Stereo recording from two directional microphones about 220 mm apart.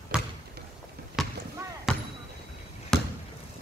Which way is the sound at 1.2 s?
Centre (ahead or behind).